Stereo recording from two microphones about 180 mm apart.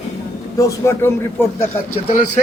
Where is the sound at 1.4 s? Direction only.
10° left (ahead or behind).